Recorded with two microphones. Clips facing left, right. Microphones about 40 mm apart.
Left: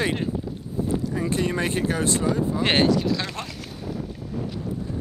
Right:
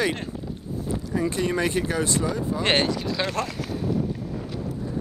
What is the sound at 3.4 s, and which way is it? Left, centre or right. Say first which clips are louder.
Speech: right 6 dB; right.